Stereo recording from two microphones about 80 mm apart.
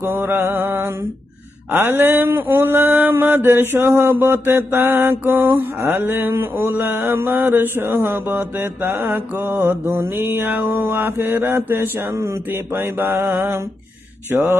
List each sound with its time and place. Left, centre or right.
0.0 s mantra: right